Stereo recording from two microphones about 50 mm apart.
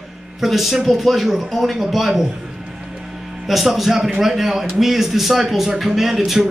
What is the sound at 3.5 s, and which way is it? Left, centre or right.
A man's voice, centre.